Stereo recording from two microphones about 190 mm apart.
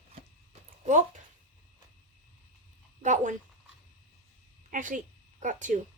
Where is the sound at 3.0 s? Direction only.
40° right (ahead or behind).